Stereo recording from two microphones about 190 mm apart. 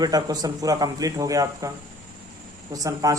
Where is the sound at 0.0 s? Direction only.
20° right (ahead or behind).